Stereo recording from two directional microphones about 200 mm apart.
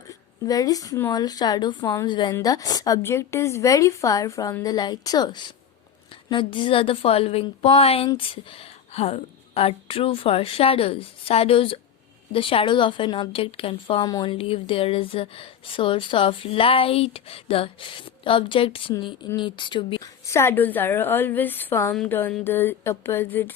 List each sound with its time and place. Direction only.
0.1 s a woman's voice: 15° left (ahead or behind)